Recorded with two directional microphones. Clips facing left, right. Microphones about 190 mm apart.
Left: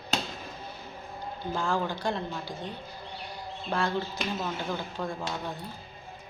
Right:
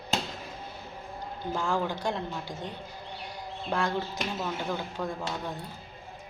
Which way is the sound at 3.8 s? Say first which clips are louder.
Left 1 dB; 15° right (ahead or behind).